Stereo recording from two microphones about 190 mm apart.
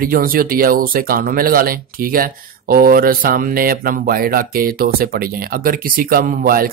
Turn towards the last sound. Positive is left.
turn(degrees=-50)  # may be behind; listen again after turning